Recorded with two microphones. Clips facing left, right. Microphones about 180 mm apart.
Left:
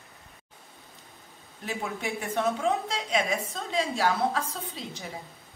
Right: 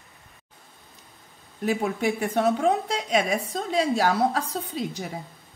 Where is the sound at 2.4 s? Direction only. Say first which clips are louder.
Right 4 dB; 40° right (ahead or behind).